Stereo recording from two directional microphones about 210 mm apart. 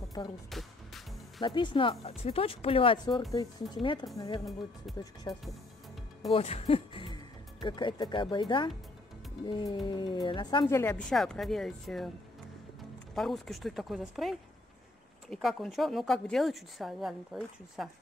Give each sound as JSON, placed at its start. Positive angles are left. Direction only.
{"t": 0.2, "sound": "speech", "side_deg": 20}
{"t": 0.5, "sound": "music", "side_deg": 0}
{"t": 1.4, "sound": "speech", "side_deg": 20}
{"t": 4.9, "sound": "speech", "side_deg": 0}
{"t": 5.3, "sound": "speech", "side_deg": 20}
{"t": 13.1, "sound": "speech", "side_deg": 0}